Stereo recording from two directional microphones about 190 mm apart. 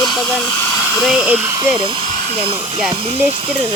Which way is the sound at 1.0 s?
Centre (ahead or behind).